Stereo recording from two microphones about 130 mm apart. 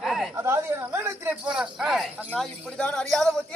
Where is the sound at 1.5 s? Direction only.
5° right (ahead or behind).